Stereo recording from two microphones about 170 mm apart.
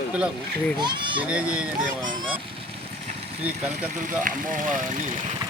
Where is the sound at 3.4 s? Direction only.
5° right (ahead or behind).